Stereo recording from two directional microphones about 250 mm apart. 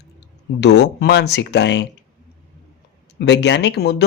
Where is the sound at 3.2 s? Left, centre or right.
Left.